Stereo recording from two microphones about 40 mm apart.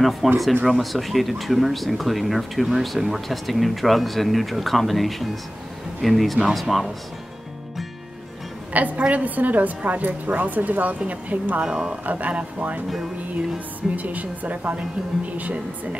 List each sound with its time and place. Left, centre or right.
0.2 s speech: centre
8.7 s a woman's voice: right
11.6 s speech: centre
12.1 s a woman's voice: right
13.9 s a woman's voice: right